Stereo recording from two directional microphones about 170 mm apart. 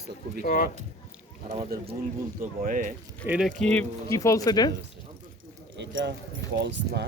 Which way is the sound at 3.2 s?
5° right (ahead or behind).